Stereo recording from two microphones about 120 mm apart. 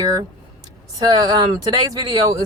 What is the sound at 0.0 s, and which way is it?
Speech, 30° right (ahead or behind).